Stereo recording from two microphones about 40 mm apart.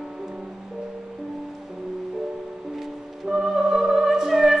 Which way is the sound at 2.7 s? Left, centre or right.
Centre.